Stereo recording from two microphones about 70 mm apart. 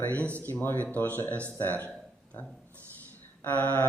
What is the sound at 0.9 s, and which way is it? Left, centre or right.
Speech, left.